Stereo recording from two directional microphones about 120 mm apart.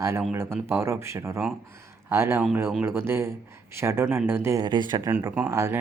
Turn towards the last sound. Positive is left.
turn(degrees=-25)  # may be behind; listen again after turning